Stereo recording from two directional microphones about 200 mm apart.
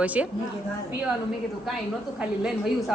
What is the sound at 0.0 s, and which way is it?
Speech, 5° right (ahead or behind).